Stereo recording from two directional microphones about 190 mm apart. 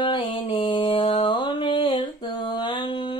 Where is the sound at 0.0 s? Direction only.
25° left (ahead or behind).